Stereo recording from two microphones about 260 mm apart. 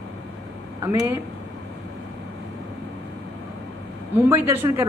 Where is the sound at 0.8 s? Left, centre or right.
Centre.